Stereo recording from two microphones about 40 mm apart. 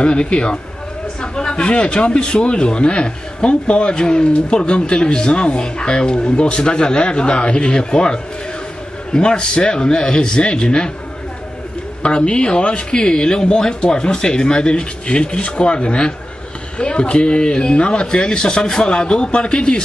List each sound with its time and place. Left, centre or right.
0.0 s speech: left
12.0 s speech: left